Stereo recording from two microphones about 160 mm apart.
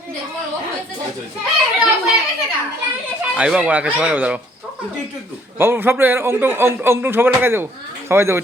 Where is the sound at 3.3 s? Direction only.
5° right (ahead or behind).